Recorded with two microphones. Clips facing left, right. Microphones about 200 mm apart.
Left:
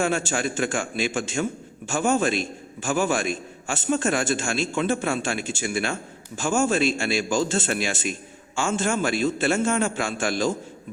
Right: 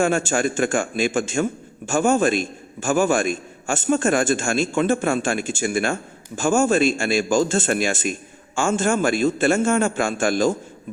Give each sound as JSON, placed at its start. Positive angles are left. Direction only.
{"t": 0.0, "sound": "a man's voice", "side_deg": -50}